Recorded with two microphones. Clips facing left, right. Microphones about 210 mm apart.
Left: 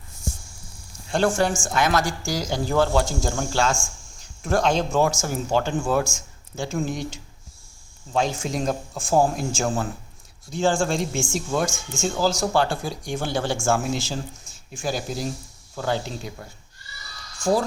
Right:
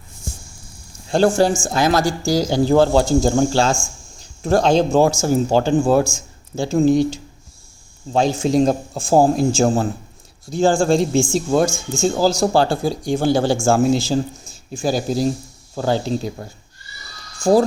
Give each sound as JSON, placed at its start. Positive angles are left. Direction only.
{"t": 1.1, "sound": "a man's voice", "side_deg": -35}